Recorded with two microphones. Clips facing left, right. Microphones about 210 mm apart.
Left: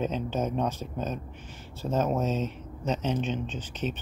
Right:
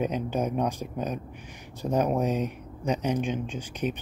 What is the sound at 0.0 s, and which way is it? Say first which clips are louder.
Speech: right 1 dB; 10° right (ahead or behind).